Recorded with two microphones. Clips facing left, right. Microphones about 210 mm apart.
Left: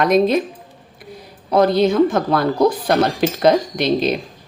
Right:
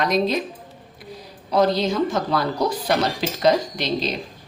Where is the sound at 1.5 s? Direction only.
55° left (ahead or behind).